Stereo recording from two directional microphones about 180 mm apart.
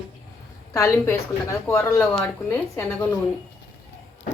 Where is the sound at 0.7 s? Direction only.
15° left (ahead or behind).